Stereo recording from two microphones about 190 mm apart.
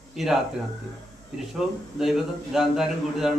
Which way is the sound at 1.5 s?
Centre (ahead or behind).